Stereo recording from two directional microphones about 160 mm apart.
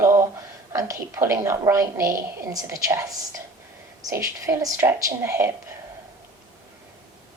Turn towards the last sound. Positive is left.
turn(degrees=-20)  # may be behind; listen again after turning